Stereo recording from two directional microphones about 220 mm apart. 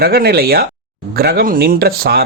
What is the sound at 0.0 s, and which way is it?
Speech, 45° right (ahead or behind).